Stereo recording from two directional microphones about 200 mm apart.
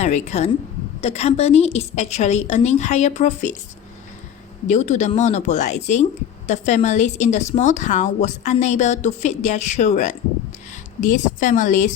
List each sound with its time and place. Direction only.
0.0 s a woman's voice: 35° left (ahead or behind)
4.7 s a woman's voice: 35° left (ahead or behind)